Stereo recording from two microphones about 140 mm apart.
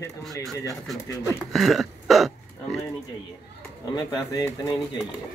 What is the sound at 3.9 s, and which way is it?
Speech, 30° left (ahead or behind).